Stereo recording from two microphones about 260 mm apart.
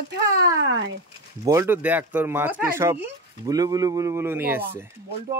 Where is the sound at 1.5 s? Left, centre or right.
Centre.